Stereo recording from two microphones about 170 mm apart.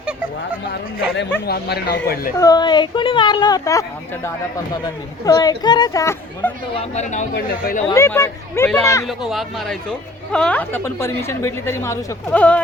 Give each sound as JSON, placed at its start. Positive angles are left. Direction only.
{"t": 1.5, "sound": "speech", "side_deg": 70}
{"t": 2.4, "sound": "a woman's voice", "side_deg": 25}
{"t": 6.4, "sound": "a woman's voice", "side_deg": 10}
{"t": 6.7, "sound": "speech", "side_deg": 40}
{"t": 7.3, "sound": "speech", "side_deg": 60}
{"t": 7.9, "sound": "a woman's voice", "side_deg": 15}
{"t": 9.0, "sound": "a woman's voice", "side_deg": 0}